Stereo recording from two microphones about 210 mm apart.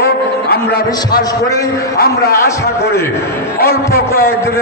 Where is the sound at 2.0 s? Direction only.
45° left (ahead or behind).